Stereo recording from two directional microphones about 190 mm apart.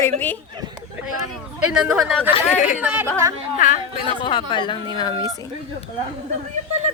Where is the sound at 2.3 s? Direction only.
35° left (ahead or behind).